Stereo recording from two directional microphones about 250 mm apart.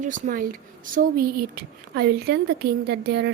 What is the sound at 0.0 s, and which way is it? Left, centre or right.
Speech, right.